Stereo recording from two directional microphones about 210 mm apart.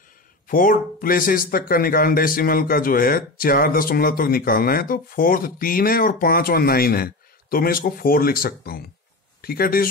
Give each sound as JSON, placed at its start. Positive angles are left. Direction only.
{"t": 0.5, "sound": "speech", "side_deg": 40}